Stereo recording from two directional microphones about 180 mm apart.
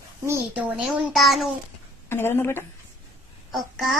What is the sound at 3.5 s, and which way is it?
Speech, centre (ahead or behind).